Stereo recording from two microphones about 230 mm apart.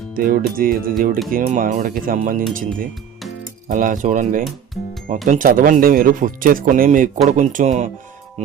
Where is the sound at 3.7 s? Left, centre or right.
Right.